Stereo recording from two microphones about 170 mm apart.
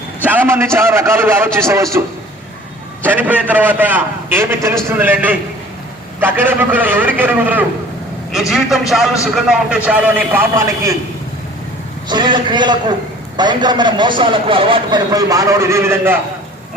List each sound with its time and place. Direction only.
0.3 s a man's voice: 15° right (ahead or behind)
12.0 s a man's voice: 25° right (ahead or behind)